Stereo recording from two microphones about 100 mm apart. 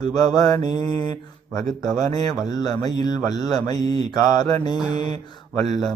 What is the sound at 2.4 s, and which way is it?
Speech, 40° left (ahead or behind).